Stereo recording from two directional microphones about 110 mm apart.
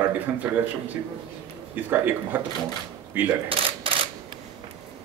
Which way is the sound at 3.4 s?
55° right (ahead or behind).